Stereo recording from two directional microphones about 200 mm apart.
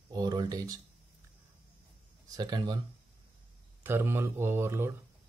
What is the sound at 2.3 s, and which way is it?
Speech, 20° right (ahead or behind).